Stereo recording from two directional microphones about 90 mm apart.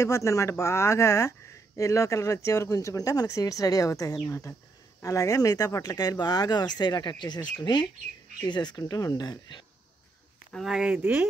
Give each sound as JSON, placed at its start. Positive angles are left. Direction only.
{"t": 0.0, "sound": "speech", "side_deg": 35}
{"t": 10.5, "sound": "speech", "side_deg": -5}